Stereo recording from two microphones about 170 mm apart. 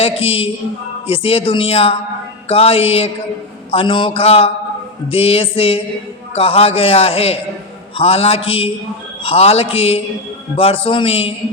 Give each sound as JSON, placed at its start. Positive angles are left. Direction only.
{"t": 0.0, "sound": "a man's voice", "side_deg": 35}